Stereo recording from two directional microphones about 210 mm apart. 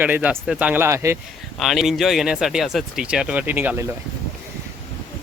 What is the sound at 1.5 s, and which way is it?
Speech, centre (ahead or behind).